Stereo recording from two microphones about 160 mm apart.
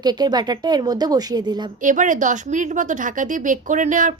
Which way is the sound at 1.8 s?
55° right (ahead or behind).